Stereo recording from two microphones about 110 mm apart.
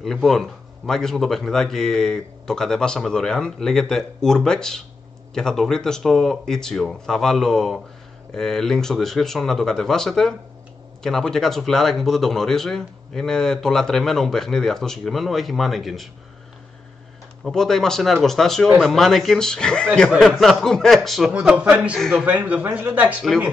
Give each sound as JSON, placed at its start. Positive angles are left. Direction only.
{"t": 0.0, "sound": "speech", "side_deg": 5}
{"t": 17.5, "sound": "speech", "side_deg": 5}
{"t": 21.3, "sound": "speech", "side_deg": -10}
{"t": 21.9, "sound": "speech", "side_deg": 0}
{"t": 22.2, "sound": "speech", "side_deg": -15}